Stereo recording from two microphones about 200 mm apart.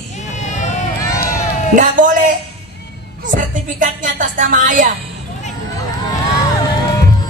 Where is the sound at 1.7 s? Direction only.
40° right (ahead or behind).